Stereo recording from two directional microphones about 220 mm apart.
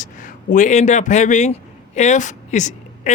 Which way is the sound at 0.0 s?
35° left (ahead or behind).